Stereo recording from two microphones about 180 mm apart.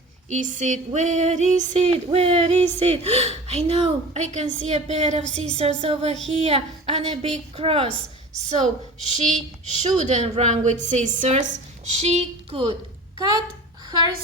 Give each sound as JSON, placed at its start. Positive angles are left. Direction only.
{"t": 0.3, "sound": "female singing", "side_deg": -45}